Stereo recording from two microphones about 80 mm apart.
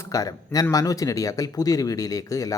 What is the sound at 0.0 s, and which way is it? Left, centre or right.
A woman's voice, left.